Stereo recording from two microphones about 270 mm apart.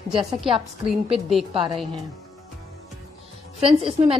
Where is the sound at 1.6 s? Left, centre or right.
Centre.